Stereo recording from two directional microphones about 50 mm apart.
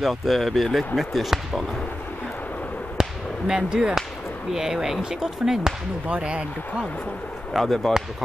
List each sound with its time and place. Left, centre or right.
0.0 s speech: centre
3.0 s a sound: centre
4.6 s speech: centre
6.0 s speech: right
7.5 s speech: centre